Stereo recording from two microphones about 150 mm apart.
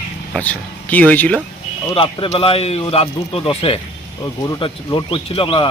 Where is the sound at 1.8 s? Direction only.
35° left (ahead or behind).